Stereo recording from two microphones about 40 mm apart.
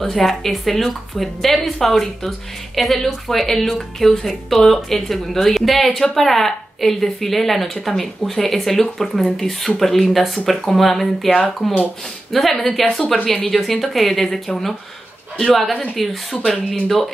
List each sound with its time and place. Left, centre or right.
0.0 s a woman's voice: centre
11.2 s speech: left
12.3 s a woman's voice: centre